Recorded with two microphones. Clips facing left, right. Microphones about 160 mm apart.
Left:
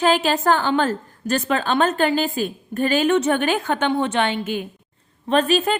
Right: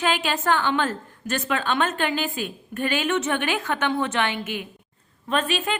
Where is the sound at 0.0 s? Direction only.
40° left (ahead or behind).